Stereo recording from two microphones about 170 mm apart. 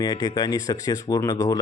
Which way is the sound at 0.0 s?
25° left (ahead or behind).